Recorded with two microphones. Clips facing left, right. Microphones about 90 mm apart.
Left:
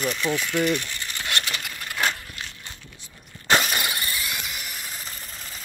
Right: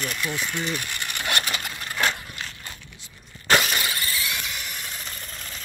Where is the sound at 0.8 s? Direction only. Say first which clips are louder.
Right 2 dB; 55° right (ahead or behind).